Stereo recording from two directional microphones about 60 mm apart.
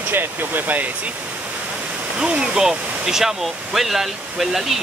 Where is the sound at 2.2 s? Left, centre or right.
Centre.